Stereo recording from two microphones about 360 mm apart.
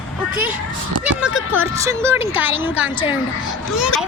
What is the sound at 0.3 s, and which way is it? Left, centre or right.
A child's voice, centre.